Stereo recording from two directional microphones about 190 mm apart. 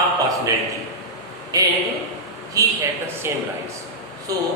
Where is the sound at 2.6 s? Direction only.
20° right (ahead or behind).